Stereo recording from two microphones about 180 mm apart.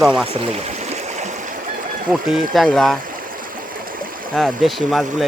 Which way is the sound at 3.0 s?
50° right (ahead or behind).